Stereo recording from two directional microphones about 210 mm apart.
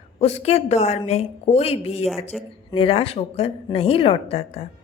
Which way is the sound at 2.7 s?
25° left (ahead or behind).